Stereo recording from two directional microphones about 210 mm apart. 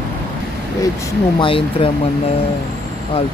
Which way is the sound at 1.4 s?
25° left (ahead or behind).